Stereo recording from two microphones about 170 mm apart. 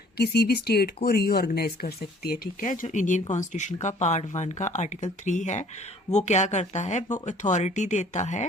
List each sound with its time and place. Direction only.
0.2 s speech: 70° left (ahead or behind); by 8.4 s 45° left (ahead or behind)